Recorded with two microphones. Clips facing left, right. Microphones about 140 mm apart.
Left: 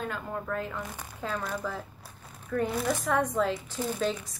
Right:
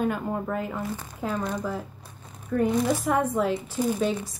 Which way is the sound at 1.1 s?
15° right (ahead or behind).